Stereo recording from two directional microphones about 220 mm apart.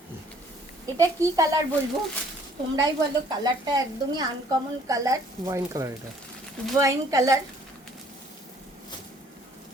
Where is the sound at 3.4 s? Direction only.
20° right (ahead or behind).